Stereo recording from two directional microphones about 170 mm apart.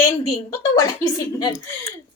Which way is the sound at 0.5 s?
20° left (ahead or behind).